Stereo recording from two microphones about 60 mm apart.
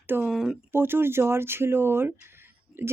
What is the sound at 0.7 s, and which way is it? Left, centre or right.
Speech, right.